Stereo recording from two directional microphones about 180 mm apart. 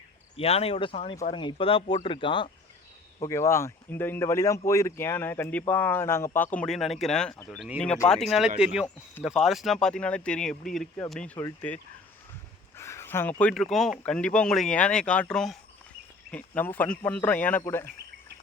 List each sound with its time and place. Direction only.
0.3 s speech: 35° left (ahead or behind)
3.2 s speech: 15° left (ahead or behind)
12.7 s speech: 15° left (ahead or behind)